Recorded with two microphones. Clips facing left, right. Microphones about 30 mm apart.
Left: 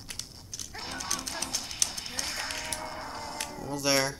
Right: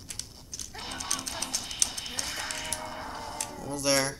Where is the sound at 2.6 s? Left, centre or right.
Centre.